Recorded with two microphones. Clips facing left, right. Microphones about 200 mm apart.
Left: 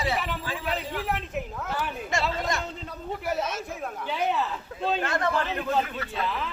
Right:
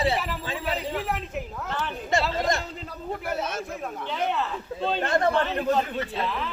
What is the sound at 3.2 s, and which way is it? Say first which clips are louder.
Speech: left 1 dB; 55° right (ahead or behind).